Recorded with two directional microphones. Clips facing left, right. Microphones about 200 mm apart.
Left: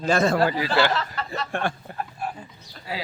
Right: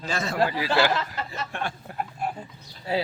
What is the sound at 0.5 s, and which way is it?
Speech, 5° right (ahead or behind).